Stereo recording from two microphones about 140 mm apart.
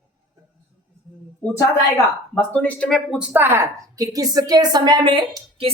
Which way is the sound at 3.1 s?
10° right (ahead or behind).